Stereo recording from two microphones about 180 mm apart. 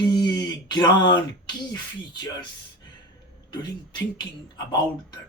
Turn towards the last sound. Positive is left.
turn(degrees=25)  # may be behind; listen again after turning